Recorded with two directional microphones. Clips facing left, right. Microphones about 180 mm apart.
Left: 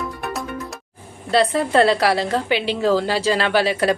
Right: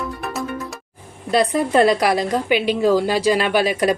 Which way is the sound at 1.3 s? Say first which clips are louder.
Even; 15° right (ahead or behind).